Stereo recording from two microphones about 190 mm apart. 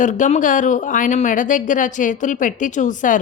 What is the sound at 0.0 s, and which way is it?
A woman's voice, 40° left (ahead or behind).